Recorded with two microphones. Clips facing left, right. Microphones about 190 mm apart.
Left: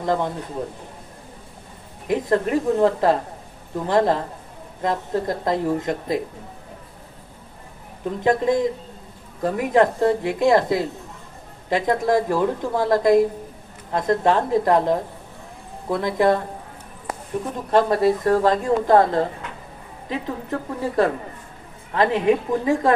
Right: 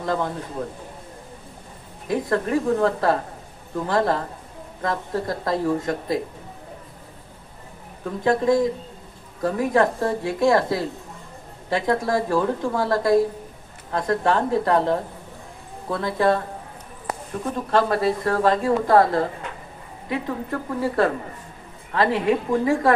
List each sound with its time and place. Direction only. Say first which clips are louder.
0.0 s speech: left 2 dB; 20° left (ahead or behind)
2.0 s a woman's voice: left 2 dB; 20° left (ahead or behind)
5.5 s a woman's voice: even; 20° left (ahead or behind)
8.0 s a woman's voice: left 1 dB; 20° left (ahead or behind)
17.7 s a woman's voice: left 3 dB; 20° left (ahead or behind)